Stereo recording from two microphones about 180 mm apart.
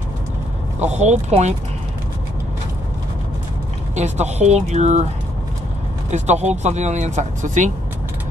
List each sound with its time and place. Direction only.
0.7 s speech: 40° right (ahead or behind)
3.9 s speech: 40° right (ahead or behind)
6.0 s speech: 40° right (ahead or behind)